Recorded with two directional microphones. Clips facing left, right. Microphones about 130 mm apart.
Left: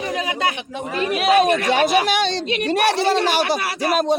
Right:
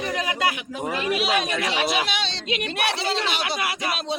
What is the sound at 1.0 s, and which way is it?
Speech, 45° left (ahead or behind).